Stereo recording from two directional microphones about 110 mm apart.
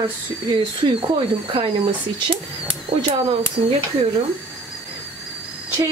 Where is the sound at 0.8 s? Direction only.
50° right (ahead or behind).